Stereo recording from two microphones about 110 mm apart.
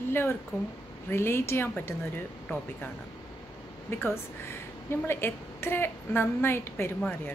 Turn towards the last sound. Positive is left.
turn(degrees=20)  # may be behind; listen again after turning